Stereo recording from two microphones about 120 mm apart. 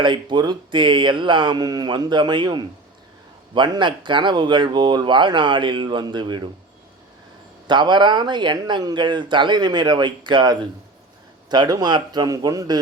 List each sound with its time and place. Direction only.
0.0 s speech: 40° right (ahead or behind)
7.7 s speech: 40° right (ahead or behind)